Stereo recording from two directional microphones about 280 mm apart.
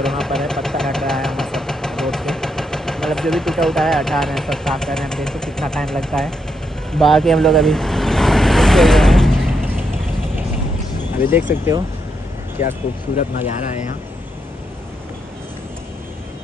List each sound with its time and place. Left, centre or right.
0.0 s engine: centre
6.9 s vehicle: centre
11.3 s speech: centre
12.5 s speech: left